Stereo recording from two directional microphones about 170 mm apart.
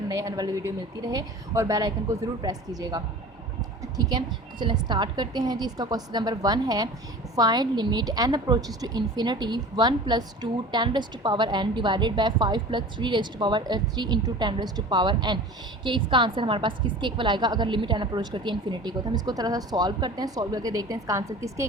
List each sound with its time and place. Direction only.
0.1 s a woman's voice: 20° right (ahead or behind)
4.6 s a woman's voice: 25° right (ahead or behind)